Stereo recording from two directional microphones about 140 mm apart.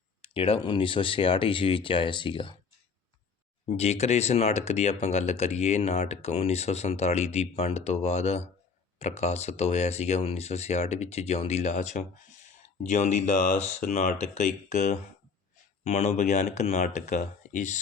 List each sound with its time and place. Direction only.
0.2 s speech: 40° left (ahead or behind)
3.7 s speech: 50° left (ahead or behind)